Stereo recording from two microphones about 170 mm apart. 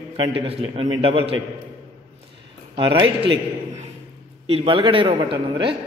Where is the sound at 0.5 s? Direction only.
35° right (ahead or behind).